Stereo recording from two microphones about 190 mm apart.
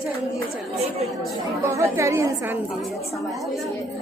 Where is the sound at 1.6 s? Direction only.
15° right (ahead or behind).